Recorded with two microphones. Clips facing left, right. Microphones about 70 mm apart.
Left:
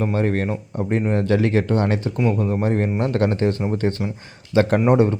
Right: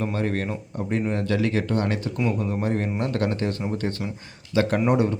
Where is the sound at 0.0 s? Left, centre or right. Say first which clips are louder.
Left 5 dB; left.